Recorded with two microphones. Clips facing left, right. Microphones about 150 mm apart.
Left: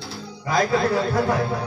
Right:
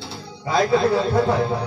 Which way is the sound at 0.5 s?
30° right (ahead or behind).